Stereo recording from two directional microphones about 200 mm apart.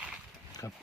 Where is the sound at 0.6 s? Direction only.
15° left (ahead or behind).